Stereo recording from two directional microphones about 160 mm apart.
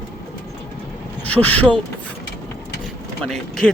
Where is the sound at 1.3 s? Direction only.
10° left (ahead or behind).